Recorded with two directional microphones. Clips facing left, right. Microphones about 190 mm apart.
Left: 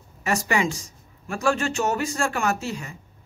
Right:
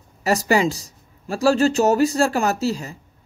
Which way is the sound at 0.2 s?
35° right (ahead or behind).